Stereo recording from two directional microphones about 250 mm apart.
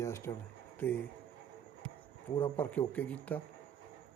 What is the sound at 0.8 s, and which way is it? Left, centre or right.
Speech, centre.